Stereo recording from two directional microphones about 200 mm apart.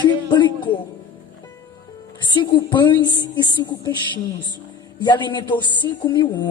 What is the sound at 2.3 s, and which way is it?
Speech, 25° left (ahead or behind).